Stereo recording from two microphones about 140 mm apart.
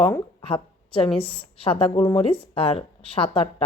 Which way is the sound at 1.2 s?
40° left (ahead or behind).